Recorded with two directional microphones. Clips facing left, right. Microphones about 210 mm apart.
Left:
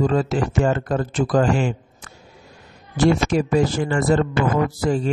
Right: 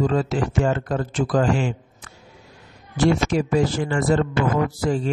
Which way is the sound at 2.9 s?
45° left (ahead or behind).